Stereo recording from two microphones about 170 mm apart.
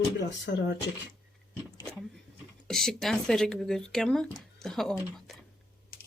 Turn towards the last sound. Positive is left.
turn(degrees=0)  # may be behind; listen again after turning